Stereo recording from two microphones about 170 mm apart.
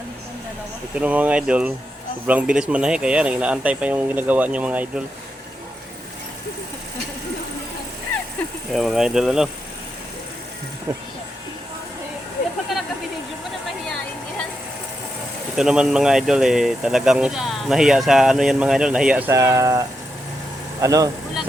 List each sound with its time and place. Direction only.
0.9 s speech: 10° right (ahead or behind)
8.7 s speech: centre (ahead or behind)
10.9 s speech: 20° right (ahead or behind)
15.5 s speech: 5° right (ahead or behind)
19.3 s speech: 20° right (ahead or behind)
20.8 s speech: 20° right (ahead or behind)